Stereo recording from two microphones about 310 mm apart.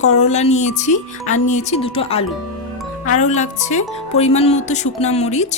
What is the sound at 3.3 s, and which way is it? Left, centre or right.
Speech, left.